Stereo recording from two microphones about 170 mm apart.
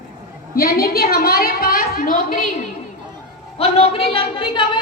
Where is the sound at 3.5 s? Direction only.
35° left (ahead or behind).